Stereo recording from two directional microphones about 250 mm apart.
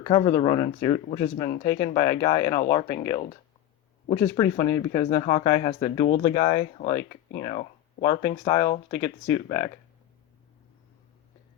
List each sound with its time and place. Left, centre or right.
0.0 s speech: left
4.1 s speech: centre
7.3 s speech: centre